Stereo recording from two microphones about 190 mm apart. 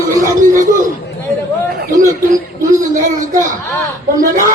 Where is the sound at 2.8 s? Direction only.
15° right (ahead or behind).